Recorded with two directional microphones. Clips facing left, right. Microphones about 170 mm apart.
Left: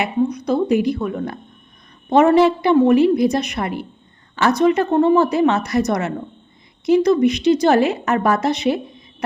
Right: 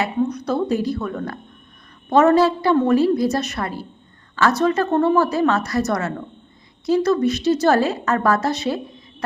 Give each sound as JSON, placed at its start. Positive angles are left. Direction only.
{"t": 0.0, "sound": "a woman's voice", "side_deg": 10}